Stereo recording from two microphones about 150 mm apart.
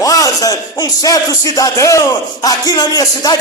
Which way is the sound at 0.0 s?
25° left (ahead or behind).